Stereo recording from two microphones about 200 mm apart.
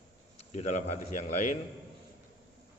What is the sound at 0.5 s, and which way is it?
A man's voice, 35° left (ahead or behind).